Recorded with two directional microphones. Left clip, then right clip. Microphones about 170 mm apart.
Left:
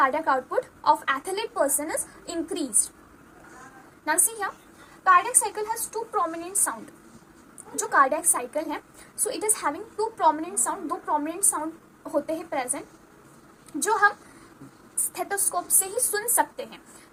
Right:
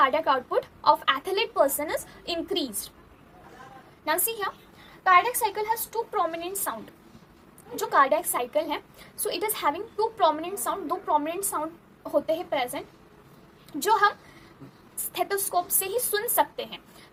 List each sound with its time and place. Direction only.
0.0 s a woman's voice: 15° right (ahead or behind)
4.0 s a woman's voice: 15° right (ahead or behind)
7.8 s a woman's voice: 15° right (ahead or behind)
13.8 s a woman's voice: 15° right (ahead or behind)
15.1 s a woman's voice: 15° right (ahead or behind)